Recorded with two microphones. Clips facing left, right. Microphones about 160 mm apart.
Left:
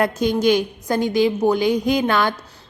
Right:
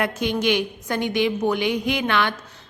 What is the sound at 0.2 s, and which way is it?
A woman's voice, 40° left (ahead or behind).